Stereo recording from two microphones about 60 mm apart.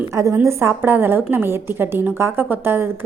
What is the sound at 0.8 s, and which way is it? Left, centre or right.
A woman's voice, right.